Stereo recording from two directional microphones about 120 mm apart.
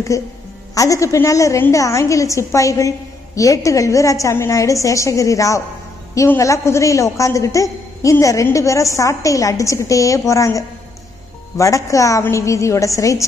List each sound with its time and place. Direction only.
0.1 s a woman's voice: 25° left (ahead or behind)